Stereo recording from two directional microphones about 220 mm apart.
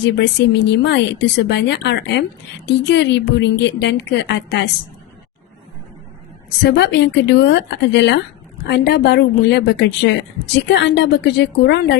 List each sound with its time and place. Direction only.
0.0 s a woman's voice: 50° left (ahead or behind)
6.6 s a woman's voice: 50° left (ahead or behind)